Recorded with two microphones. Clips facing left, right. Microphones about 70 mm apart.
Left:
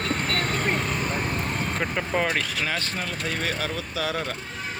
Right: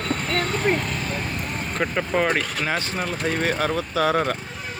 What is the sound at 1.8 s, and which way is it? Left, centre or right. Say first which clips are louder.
Vehicle: right 5 dB; centre.